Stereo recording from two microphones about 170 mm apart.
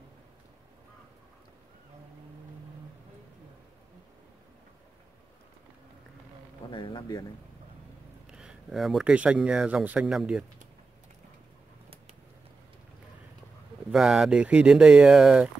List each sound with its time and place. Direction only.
6.7 s a sound: 30° left (ahead or behind)
8.3 s speech: 5° right (ahead or behind)
13.9 s speech: 5° right (ahead or behind)